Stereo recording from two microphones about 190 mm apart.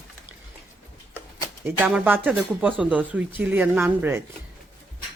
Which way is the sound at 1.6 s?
10° right (ahead or behind).